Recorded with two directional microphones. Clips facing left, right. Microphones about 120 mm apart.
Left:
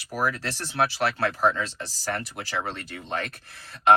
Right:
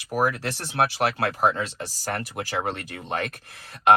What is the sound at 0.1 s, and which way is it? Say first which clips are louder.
Speech: right 3 dB; 50° right (ahead or behind).